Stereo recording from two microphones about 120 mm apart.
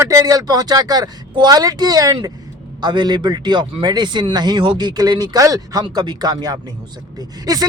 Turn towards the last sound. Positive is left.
turn(degrees=-30)  # may be behind; listen again after turning